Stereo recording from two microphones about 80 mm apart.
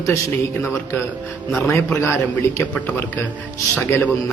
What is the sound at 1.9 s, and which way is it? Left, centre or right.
Speech, left.